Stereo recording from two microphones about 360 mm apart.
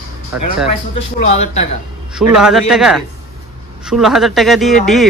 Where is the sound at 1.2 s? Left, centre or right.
Centre.